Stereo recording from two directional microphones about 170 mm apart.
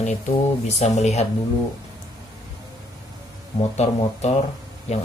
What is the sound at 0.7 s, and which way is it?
Speech, 40° left (ahead or behind).